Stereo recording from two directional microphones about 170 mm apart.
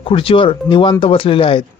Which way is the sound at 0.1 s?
30° left (ahead or behind).